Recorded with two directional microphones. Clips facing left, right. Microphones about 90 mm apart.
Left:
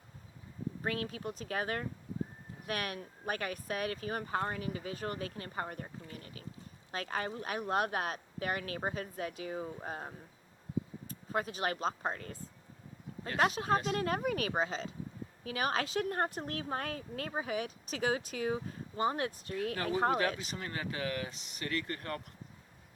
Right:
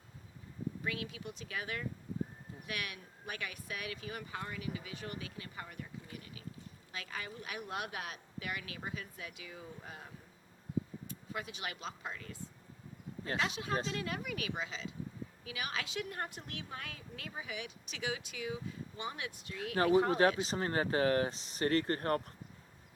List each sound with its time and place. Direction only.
0.8 s speech: 45° left (ahead or behind)
19.7 s speech: 30° right (ahead or behind)